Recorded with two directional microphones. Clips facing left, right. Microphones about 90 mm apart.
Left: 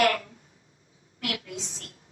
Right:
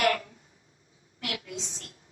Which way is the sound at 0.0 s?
25° right (ahead or behind).